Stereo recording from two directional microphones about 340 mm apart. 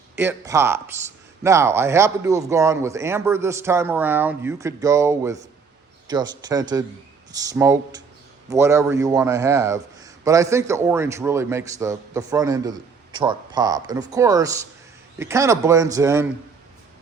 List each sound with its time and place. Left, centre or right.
0.2 s a man's voice: centre